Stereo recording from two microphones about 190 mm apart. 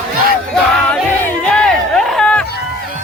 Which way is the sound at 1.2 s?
5° left (ahead or behind).